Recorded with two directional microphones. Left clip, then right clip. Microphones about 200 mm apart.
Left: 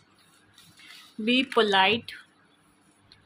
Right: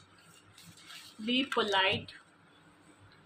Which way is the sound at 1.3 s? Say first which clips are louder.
Left 8 dB; 55° left (ahead or behind).